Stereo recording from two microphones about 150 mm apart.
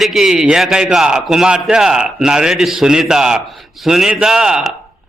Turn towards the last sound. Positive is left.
turn(degrees=-5)  # may be behind; listen again after turning